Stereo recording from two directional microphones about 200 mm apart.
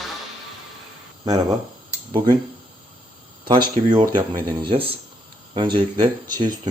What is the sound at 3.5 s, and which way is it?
Speech, 20° right (ahead or behind).